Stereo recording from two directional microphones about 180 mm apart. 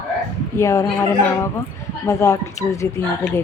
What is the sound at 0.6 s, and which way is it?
Speech, 15° left (ahead or behind).